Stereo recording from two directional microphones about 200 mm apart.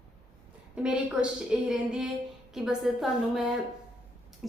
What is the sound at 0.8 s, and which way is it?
A woman's voice, 5° right (ahead or behind).